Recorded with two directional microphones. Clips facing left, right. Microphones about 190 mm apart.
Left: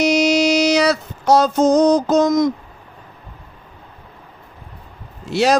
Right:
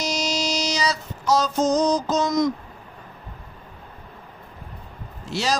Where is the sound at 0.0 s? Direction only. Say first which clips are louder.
Left 11 dB; 60° left (ahead or behind).